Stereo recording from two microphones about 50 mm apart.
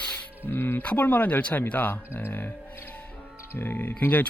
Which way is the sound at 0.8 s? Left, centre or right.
Left.